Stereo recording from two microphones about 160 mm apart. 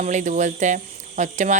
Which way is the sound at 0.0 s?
50° right (ahead or behind).